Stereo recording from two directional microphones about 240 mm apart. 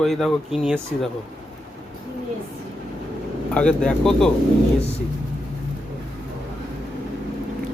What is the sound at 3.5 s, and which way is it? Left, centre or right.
Speech, centre.